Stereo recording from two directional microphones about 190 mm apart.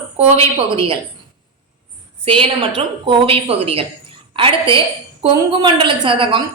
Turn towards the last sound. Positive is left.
turn(degrees=-25)  # may be behind; listen again after turning